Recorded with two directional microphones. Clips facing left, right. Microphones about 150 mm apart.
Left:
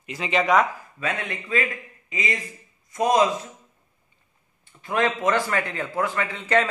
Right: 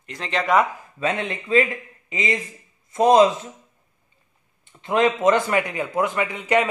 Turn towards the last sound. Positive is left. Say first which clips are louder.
# right 2 dB
turn(degrees=-15)  # may be behind; listen again after turning